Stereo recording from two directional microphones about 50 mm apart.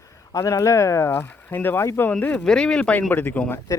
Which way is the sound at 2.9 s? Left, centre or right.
Left.